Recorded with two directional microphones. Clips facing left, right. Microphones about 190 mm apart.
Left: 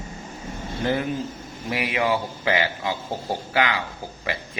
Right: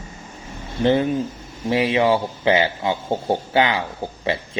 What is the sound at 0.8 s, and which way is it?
Speech, 25° right (ahead or behind).